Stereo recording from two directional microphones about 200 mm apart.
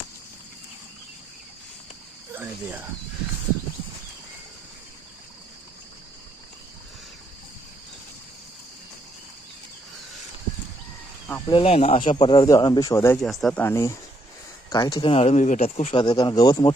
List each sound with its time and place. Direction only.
2.3 s speech: 10° right (ahead or behind)
11.3 s speech: 10° left (ahead or behind)
11.5 s speech: 30° left (ahead or behind)
13.2 s speech: 5° left (ahead or behind); by 16.7 s 20° left (ahead or behind)